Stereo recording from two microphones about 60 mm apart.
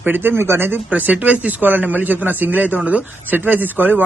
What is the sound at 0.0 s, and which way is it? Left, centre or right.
Speech, right.